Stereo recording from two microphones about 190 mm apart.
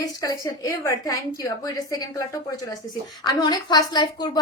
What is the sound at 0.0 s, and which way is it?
A woman's voice, 20° left (ahead or behind).